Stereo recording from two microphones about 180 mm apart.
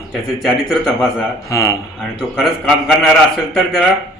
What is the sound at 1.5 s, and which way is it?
Speech, 15° left (ahead or behind).